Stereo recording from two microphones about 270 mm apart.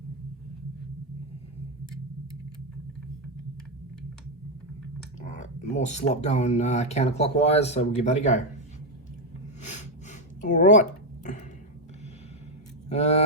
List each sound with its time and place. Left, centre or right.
5.2 s speech: left
9.6 s a sound: left
12.9 s speech: left